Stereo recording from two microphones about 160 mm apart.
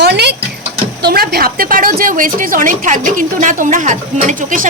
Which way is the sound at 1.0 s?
75° right (ahead or behind).